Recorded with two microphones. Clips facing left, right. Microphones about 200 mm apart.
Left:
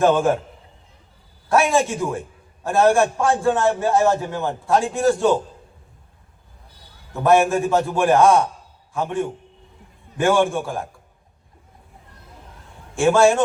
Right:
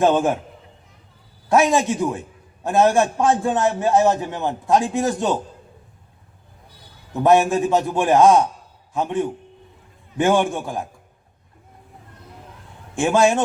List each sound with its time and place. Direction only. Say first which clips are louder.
0.0 s a man's voice: even; 20° right (ahead or behind)
1.5 s a man's voice: right 1 dB; 20° right (ahead or behind)
7.1 s a man's voice: right 1 dB; 20° right (ahead or behind)
13.0 s a man's voice: left 2 dB; 20° right (ahead or behind)